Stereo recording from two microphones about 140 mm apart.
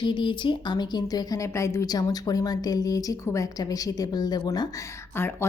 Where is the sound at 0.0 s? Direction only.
35° left (ahead or behind).